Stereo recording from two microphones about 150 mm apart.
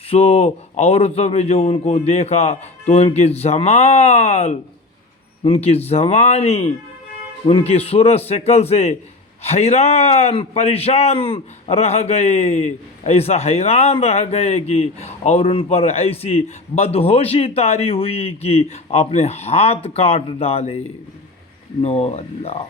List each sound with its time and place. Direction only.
0.1 s a man's voice: 45° left (ahead or behind)
21.8 s a man's voice: 45° left (ahead or behind)